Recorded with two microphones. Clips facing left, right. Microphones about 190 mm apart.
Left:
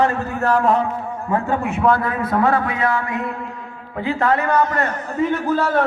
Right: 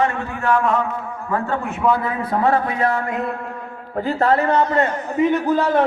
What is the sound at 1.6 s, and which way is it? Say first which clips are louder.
Speech: left 1 dB; centre (ahead or behind).